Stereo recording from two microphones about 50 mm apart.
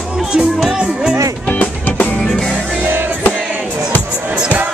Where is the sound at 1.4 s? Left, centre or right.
Left.